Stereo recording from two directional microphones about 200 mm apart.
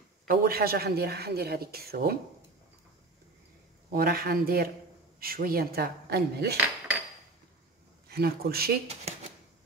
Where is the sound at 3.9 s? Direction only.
50° right (ahead or behind).